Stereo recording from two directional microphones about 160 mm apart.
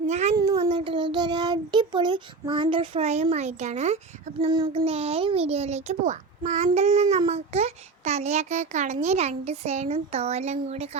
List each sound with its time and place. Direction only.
0.1 s a sound: 45° right (ahead or behind)
0.3 s child singing: 20° right (ahead or behind); by 4.4 s 45° right (ahead or behind)
4.4 s a child's voice: 30° right (ahead or behind)